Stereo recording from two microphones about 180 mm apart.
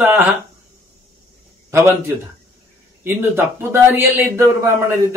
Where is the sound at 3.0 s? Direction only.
15° right (ahead or behind).